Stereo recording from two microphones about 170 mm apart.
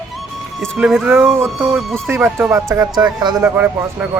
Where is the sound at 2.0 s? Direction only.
15° right (ahead or behind).